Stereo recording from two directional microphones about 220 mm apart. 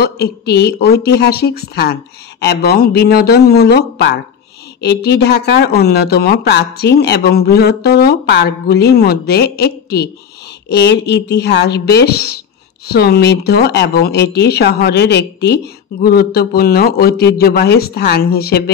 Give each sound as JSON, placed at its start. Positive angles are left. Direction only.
{"t": 0.0, "sound": "speech", "side_deg": 45}